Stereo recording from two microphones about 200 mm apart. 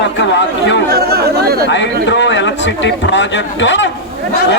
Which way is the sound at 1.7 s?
65° left (ahead or behind).